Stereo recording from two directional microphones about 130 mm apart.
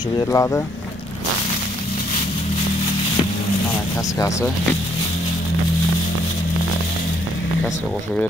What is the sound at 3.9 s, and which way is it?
Speech, 25° left (ahead or behind).